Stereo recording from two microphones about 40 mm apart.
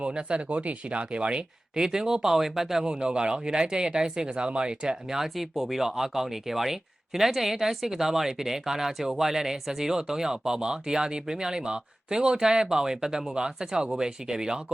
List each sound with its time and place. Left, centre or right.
0.0 s speech: right; by 2.8 s centre
2.8 s speech: right